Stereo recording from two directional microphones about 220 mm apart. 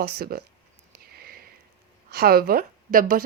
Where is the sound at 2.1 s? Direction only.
45° right (ahead or behind).